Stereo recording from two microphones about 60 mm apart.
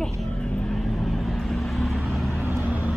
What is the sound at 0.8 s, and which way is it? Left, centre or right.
Vehicle, centre.